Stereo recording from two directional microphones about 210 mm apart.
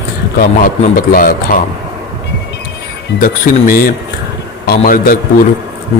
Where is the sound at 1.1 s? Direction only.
45° left (ahead or behind).